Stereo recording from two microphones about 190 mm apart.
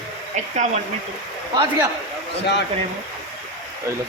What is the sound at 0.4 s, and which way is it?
Speech, 40° right (ahead or behind).